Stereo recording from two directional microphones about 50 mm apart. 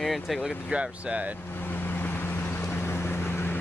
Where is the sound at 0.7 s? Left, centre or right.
Right.